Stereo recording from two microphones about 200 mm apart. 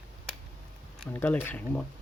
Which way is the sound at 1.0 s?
10° left (ahead or behind).